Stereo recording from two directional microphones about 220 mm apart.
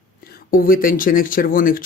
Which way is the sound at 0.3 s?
40° left (ahead or behind).